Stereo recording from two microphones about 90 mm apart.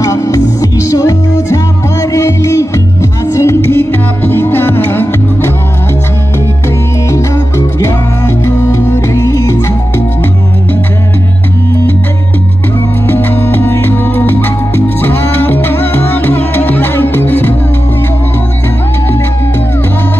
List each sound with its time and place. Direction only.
0.0 s music: 35° left (ahead or behind)
7.1 s music: 30° left (ahead or behind)
13.0 s music: 20° left (ahead or behind)